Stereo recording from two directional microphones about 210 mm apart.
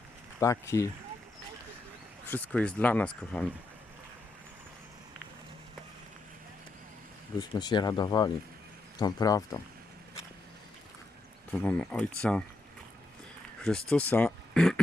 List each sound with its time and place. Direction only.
0.3 s speech: 15° left (ahead or behind)
2.3 s speech: 5° left (ahead or behind)
7.3 s speech: 20° left (ahead or behind)
11.6 s speech: 5° left (ahead or behind)
13.6 s speech: 5° left (ahead or behind)